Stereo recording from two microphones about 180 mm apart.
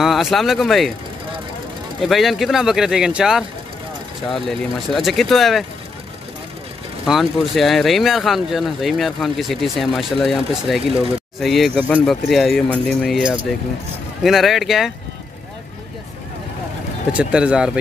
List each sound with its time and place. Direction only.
0.0 s speech: centre (ahead or behind)
2.0 s speech: centre (ahead or behind)
7.1 s speech: centre (ahead or behind)
17.2 s speech: 5° right (ahead or behind)